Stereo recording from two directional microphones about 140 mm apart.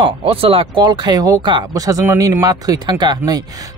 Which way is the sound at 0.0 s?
40° right (ahead or behind).